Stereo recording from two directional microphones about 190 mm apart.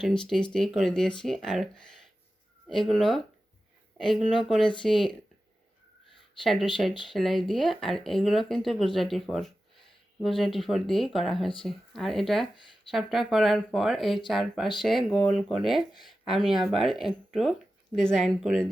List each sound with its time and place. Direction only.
0.0 s speech: centre (ahead or behind)
4.6 s speech: 25° left (ahead or behind)
6.1 s a sound: centre (ahead or behind)
7.1 s speech: centre (ahead or behind)